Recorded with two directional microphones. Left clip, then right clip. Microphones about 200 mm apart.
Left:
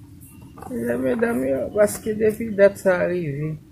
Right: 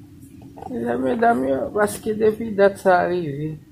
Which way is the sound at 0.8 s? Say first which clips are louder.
Right 4 dB; 10° left (ahead or behind).